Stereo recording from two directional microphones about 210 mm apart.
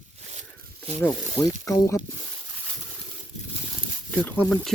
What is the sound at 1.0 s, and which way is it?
Speech, 10° left (ahead or behind).